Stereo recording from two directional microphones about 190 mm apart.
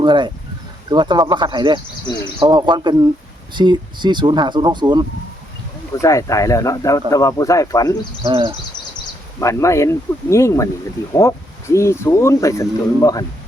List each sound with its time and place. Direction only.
0.0 s speech: 25° right (ahead or behind)
5.9 s speech: 15° left (ahead or behind)
8.2 s speech: 25° right (ahead or behind)
9.4 s speech: 15° left (ahead or behind)